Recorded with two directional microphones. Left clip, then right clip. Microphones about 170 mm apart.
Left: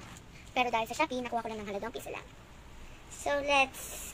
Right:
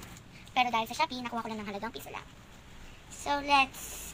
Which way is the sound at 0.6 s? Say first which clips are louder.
Right 1 dB; 15° left (ahead or behind).